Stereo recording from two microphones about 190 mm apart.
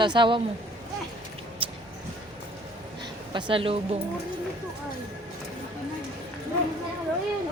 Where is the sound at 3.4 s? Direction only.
25° right (ahead or behind).